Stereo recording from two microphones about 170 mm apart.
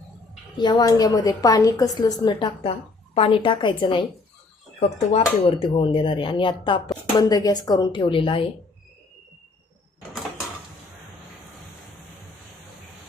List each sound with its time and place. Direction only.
0.5 s a woman's voice: 25° left (ahead or behind)